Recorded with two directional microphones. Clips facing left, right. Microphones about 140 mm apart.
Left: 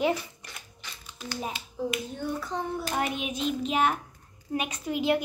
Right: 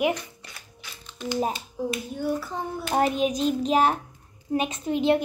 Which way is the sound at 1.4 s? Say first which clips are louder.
Right 4 dB; 40° right (ahead or behind).